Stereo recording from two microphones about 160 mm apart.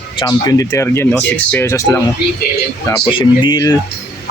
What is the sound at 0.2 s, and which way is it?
Speech, 25° left (ahead or behind).